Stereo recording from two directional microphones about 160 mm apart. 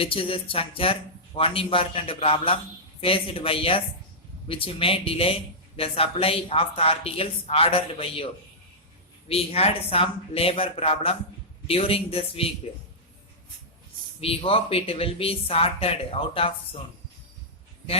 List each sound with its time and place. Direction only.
0.0 s speech: 35° left (ahead or behind)
9.3 s speech: 40° left (ahead or behind)
14.2 s speech: 35° left (ahead or behind)